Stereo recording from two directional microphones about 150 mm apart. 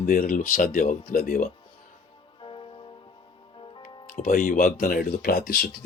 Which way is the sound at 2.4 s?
35° left (ahead or behind).